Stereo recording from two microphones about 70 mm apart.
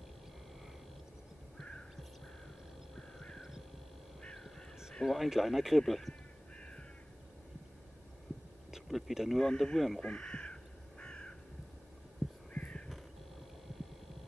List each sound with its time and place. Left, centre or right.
1.6 s a sound: centre
3.0 s horse: centre
4.2 s crow: centre
5.0 s speech: centre
8.7 s a sound: centre
9.5 s speech: centre
10.0 s crow: centre
12.5 s crow: centre